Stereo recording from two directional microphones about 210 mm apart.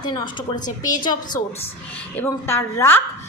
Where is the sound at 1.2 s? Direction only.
40° left (ahead or behind).